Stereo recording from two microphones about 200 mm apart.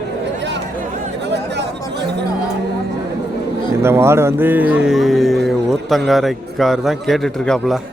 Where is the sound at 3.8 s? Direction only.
15° right (ahead or behind).